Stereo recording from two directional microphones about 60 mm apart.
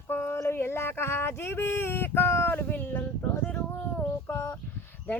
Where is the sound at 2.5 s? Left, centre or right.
Left.